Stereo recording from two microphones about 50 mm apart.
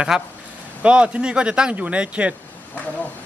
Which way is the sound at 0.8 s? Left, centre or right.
Right.